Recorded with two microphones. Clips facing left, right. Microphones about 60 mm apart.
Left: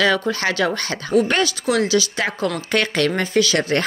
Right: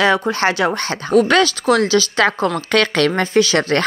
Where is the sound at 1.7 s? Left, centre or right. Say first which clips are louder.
Right 4 dB; right.